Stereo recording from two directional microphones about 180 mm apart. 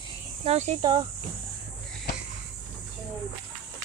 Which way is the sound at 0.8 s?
20° right (ahead or behind).